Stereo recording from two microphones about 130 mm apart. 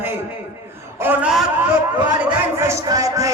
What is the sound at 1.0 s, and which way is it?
Speech, 10° right (ahead or behind).